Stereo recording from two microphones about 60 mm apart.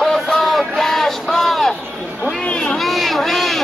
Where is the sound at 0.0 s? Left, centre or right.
Centre.